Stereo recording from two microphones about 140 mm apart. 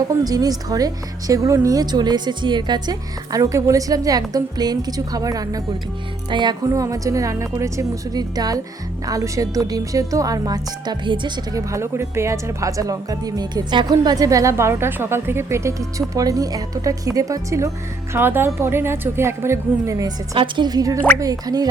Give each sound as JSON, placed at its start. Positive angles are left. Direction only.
{"t": 0.3, "sound": "speech", "side_deg": -25}
{"t": 11.7, "sound": "speech", "side_deg": -20}
{"t": 20.3, "sound": "speech", "side_deg": -35}